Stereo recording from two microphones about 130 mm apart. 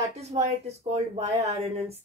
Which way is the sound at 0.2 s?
55° right (ahead or behind).